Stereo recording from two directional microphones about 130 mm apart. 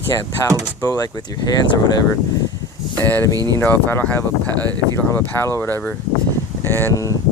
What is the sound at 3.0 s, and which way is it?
Speech, 15° left (ahead or behind).